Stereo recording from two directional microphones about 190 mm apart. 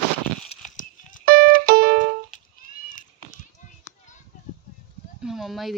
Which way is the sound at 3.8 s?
40° left (ahead or behind).